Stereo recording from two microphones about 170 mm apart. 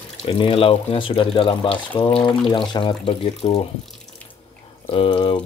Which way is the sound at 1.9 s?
10° left (ahead or behind).